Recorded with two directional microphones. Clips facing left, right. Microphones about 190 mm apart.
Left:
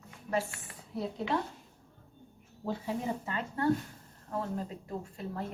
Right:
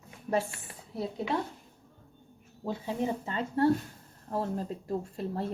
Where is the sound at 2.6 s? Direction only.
25° right (ahead or behind).